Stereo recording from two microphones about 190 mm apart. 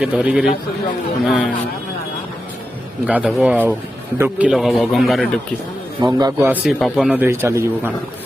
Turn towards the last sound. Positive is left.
turn(degrees=-15)  # may be behind; listen again after turning